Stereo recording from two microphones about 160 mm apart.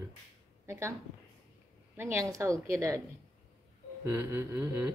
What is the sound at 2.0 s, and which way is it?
A woman's voice, 20° right (ahead or behind).